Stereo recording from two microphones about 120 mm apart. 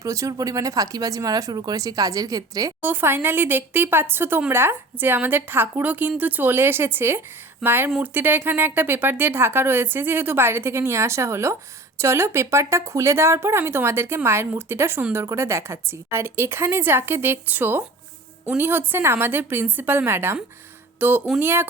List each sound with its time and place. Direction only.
0.0 s speech: 25° right (ahead or behind)
2.8 s speech: 20° right (ahead or behind)